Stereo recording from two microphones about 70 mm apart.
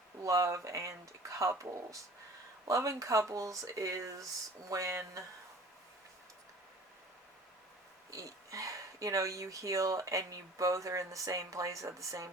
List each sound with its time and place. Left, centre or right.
0.2 s speech: right
8.1 s speech: right